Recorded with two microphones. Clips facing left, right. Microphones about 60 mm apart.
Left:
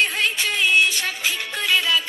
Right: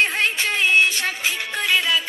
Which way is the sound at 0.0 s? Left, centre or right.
Right.